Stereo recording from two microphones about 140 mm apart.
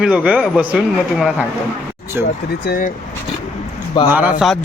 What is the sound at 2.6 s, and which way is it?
Speech, 75° left (ahead or behind).